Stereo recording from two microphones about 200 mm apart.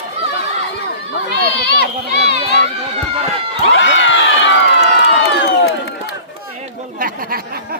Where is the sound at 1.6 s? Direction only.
55° left (ahead or behind).